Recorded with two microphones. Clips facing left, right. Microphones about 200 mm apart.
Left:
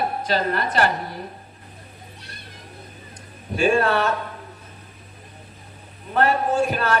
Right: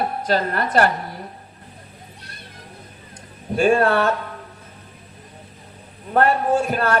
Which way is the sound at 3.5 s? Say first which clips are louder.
Right 3 dB; 50° right (ahead or behind).